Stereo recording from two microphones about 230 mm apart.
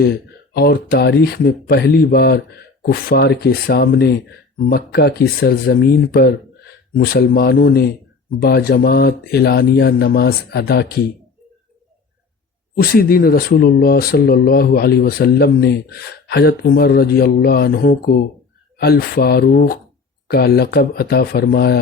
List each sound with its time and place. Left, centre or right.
0.0 s speech: left
12.8 s speech: left